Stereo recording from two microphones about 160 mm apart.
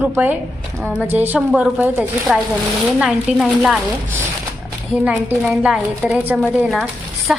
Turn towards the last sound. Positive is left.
turn(degrees=0)  # may be behind; listen again after turning